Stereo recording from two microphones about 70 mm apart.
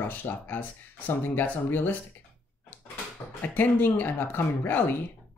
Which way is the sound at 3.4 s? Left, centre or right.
Left.